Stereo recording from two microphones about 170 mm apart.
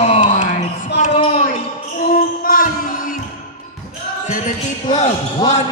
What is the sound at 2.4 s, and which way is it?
Music, 55° left (ahead or behind).